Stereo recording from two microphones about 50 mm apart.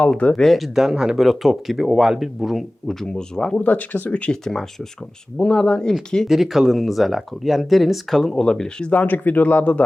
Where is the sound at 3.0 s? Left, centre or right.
Centre.